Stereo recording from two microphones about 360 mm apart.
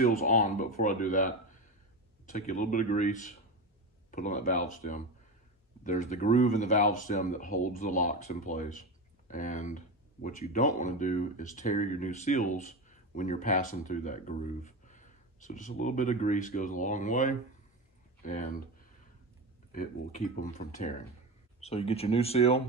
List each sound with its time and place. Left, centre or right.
0.0 s speech: left
19.7 s speech: left